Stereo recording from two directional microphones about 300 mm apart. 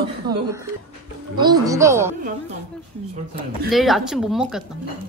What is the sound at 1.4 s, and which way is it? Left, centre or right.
Speech, centre.